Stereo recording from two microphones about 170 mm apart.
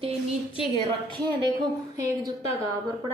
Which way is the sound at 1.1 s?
25° right (ahead or behind).